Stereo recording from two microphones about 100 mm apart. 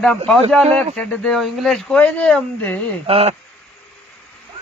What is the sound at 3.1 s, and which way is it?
Speech, 75° right (ahead or behind).